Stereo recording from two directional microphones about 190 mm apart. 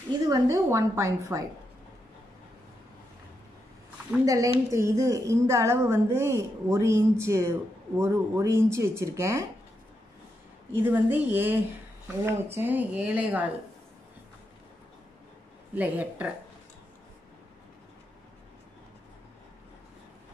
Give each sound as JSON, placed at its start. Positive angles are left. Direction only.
{"t": 0.3, "sound": "a woman's voice", "side_deg": -15}
{"t": 4.3, "sound": "a woman's voice", "side_deg": -15}
{"t": 10.7, "sound": "a woman's voice", "side_deg": -10}
{"t": 15.7, "sound": "a woman's voice", "side_deg": -10}